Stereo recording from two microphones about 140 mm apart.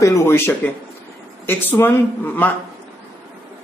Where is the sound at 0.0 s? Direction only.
20° left (ahead or behind).